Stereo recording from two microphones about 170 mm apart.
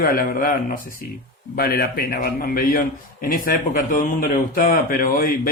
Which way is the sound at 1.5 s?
65° left (ahead or behind).